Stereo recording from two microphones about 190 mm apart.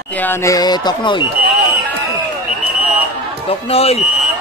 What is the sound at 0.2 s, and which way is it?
Speech, 15° left (ahead or behind).